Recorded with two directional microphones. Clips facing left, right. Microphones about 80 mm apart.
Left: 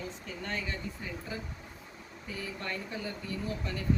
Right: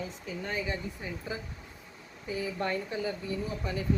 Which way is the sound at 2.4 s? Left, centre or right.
Centre.